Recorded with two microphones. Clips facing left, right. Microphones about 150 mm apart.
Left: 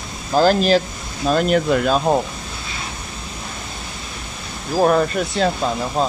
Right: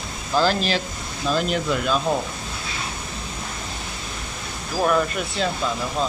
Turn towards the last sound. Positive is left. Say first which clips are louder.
# left 4 dB
turn(degrees=40)  # may be behind; listen again after turning